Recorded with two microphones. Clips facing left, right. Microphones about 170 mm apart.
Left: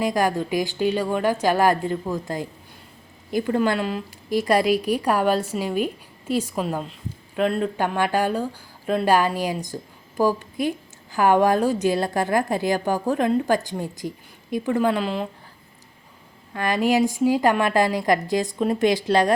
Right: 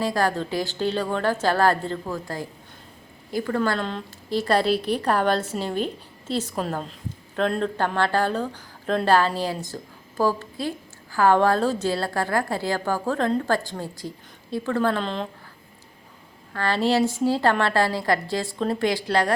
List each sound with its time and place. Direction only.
0.0 s speech: 15° left (ahead or behind)
16.5 s speech: 15° left (ahead or behind)